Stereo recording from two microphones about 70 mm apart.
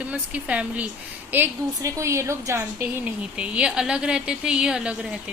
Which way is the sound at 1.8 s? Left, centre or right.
Right.